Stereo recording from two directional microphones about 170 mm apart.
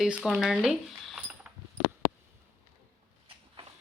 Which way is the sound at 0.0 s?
Centre (ahead or behind).